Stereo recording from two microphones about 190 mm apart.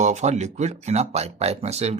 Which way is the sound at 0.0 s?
40° right (ahead or behind).